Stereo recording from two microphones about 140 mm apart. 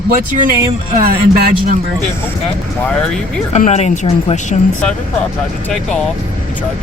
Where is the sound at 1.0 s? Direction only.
90° right.